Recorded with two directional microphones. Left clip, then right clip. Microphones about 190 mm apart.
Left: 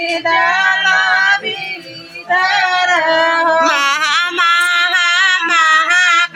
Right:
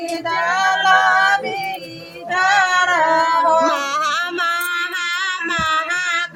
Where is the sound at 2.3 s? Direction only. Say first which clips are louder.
Left 2 dB; 70° right (ahead or behind).